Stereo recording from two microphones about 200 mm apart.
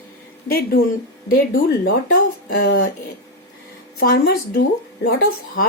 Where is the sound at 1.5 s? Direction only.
45° left (ahead or behind).